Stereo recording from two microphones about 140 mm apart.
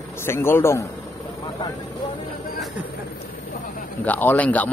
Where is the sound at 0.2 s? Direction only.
15° left (ahead or behind).